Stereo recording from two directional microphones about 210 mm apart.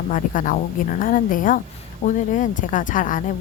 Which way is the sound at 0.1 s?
40° left (ahead or behind).